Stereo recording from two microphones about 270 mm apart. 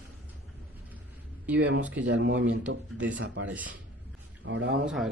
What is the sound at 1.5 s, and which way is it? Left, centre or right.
Speech, centre.